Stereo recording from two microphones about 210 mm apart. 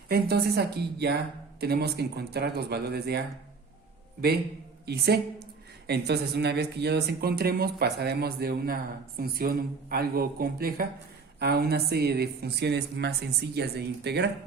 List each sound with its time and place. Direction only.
0.1 s speech: 50° right (ahead or behind)
4.9 s speech: 50° right (ahead or behind)